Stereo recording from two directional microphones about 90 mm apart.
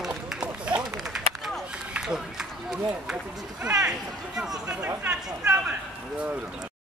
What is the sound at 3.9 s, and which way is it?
Speech, 5° right (ahead or behind).